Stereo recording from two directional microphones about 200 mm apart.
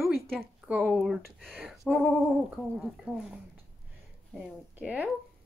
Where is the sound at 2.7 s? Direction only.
Centre (ahead or behind).